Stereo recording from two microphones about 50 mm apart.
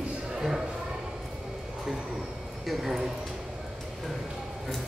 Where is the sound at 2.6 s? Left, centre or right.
Centre.